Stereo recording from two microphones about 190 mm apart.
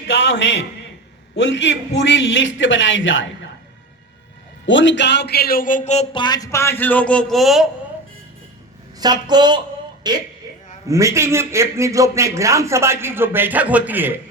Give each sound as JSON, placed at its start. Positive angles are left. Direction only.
{"t": 0.1, "sound": "a man's voice", "side_deg": 70}
{"t": 4.6, "sound": "speech", "side_deg": 75}
{"t": 6.2, "sound": "speech", "side_deg": 20}
{"t": 9.0, "sound": "a man's voice", "side_deg": -20}